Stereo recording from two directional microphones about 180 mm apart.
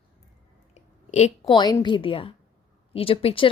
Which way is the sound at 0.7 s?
40° left (ahead or behind).